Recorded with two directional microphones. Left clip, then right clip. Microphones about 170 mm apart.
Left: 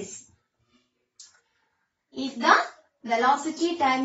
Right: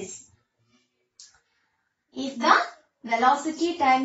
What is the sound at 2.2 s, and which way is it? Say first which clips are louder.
A woman's voice: even; 15° right (ahead or behind).